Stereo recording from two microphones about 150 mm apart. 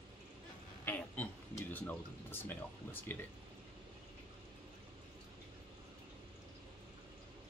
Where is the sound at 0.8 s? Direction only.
10° left (ahead or behind).